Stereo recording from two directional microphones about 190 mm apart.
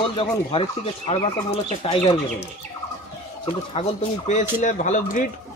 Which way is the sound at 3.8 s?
35° left (ahead or behind).